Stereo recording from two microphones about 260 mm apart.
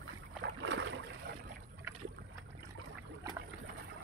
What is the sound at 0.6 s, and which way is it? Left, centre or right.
Boat, right.